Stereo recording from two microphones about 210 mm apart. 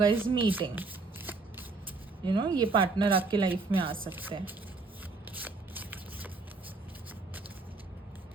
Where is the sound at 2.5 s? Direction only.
25° right (ahead or behind).